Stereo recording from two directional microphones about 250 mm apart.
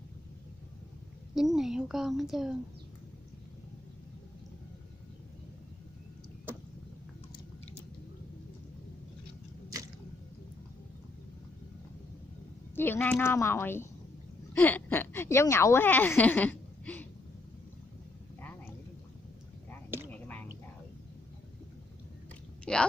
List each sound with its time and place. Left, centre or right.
1.3 s a woman's voice: centre
12.7 s a woman's voice: centre
20.1 s whispering: centre
22.7 s a sound: centre